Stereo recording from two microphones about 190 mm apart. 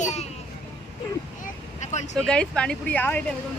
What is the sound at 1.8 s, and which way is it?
Vehicle, 40° left (ahead or behind).